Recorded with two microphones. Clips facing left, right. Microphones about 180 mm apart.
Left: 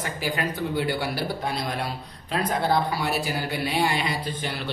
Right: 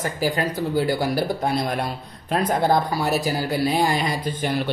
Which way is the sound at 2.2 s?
45° right (ahead or behind).